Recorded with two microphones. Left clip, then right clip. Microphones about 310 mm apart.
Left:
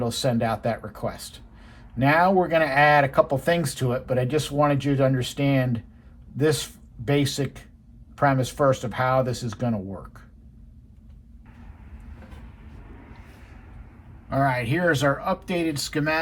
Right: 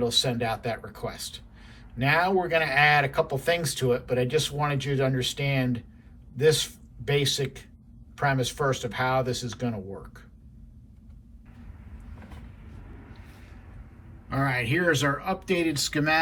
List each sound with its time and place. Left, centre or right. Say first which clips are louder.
0.0 s speech: even; centre
14.3 s speech: left 3 dB; centre